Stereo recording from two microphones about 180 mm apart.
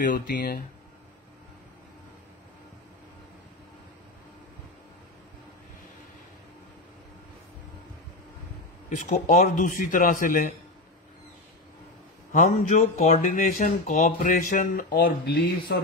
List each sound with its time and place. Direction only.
0.0 s speech: 50° left (ahead or behind)
8.9 s speech: 45° left (ahead or behind)
12.3 s speech: 40° left (ahead or behind)